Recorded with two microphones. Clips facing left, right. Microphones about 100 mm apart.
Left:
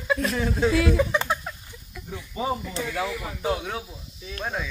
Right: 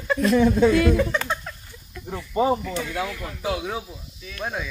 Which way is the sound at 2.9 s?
5° left (ahead or behind).